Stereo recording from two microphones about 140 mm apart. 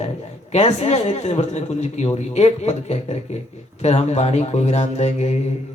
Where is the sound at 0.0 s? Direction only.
50° left (ahead or behind).